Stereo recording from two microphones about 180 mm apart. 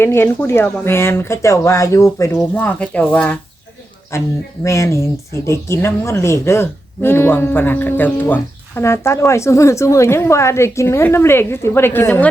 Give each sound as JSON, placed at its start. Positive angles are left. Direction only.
{"t": 0.0, "sound": "speech", "side_deg": 10}